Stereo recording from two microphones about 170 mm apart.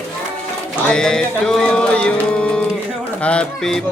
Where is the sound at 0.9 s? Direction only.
5° left (ahead or behind).